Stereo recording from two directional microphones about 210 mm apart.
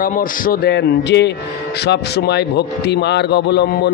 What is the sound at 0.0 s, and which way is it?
A man's voice, 40° left (ahead or behind).